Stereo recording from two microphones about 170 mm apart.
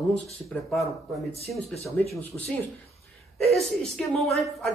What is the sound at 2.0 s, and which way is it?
Speech, 5° left (ahead or behind).